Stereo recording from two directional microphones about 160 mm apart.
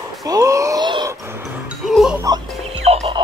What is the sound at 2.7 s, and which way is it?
Music, 40° right (ahead or behind).